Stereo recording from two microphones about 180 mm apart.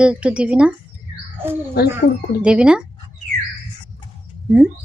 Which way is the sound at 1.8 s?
65° left (ahead or behind).